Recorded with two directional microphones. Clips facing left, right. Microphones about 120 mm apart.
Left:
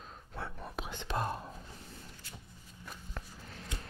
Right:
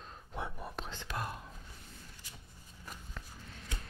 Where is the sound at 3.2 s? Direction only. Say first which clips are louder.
Left 3 dB; 50° left (ahead or behind).